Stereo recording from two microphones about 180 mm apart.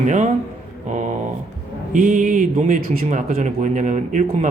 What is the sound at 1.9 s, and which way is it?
Speech, 45° right (ahead or behind).